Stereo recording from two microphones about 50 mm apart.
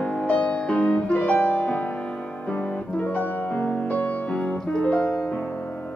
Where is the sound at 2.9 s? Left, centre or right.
Left.